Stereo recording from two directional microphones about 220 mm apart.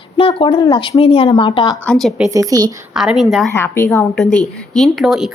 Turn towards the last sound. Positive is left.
turn(degrees=0)  # may be behind; listen again after turning